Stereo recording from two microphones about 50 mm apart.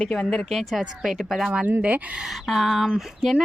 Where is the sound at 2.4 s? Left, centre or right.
Centre.